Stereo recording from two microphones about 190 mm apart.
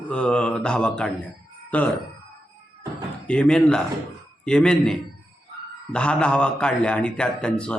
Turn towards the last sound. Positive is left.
turn(degrees=5)  # may be behind; listen again after turning